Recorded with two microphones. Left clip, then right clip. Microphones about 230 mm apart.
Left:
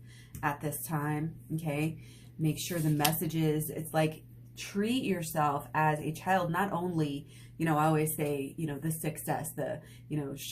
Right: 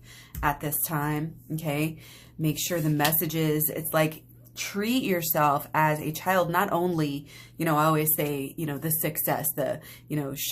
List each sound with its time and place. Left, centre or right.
0.3 s a woman's voice: right